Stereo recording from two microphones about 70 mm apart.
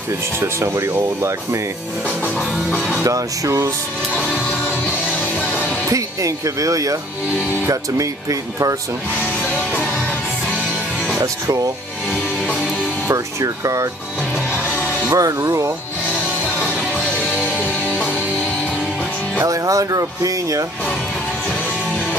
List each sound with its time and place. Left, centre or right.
0.4 s speech: right
2.2 s music: left
3.0 s speech: right
4.1 s music: centre
5.9 s speech: right
9.2 s music: left
11.1 s speech: right
13.1 s speech: right
14.5 s music: left
15.0 s speech: right
17.2 s music: left
19.4 s speech: right